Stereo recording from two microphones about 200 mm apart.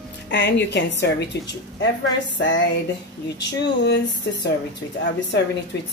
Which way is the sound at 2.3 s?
65° left (ahead or behind).